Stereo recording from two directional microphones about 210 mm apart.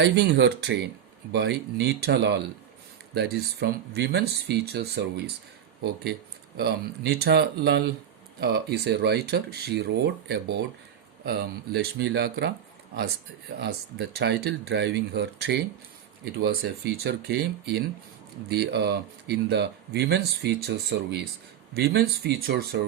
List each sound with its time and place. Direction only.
0.0 s speech: 55° right (ahead or behind)
14.2 s speech: 50° right (ahead or behind)